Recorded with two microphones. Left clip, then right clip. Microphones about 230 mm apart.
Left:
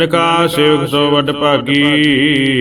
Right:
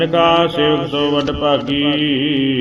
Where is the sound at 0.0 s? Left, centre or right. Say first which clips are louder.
Left 1 dB; left.